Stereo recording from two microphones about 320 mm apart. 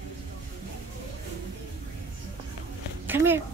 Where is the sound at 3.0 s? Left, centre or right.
Centre.